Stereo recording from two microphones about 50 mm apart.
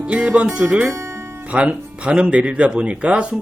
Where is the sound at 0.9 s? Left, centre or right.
Right.